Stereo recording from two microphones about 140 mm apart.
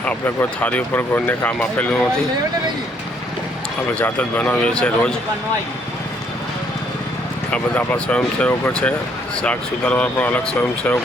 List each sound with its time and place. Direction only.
0.0 s speech: 15° left (ahead or behind)
3.9 s speech: 10° left (ahead or behind)
7.5 s speech: 10° left (ahead or behind)